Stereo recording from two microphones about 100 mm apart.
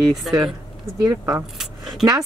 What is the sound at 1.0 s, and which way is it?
Speech, 35° right (ahead or behind).